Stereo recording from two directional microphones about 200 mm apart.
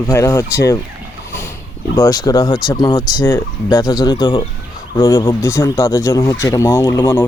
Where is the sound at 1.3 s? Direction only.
15° left (ahead or behind).